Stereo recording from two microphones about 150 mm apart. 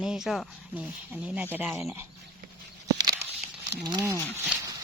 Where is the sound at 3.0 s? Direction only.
25° right (ahead or behind).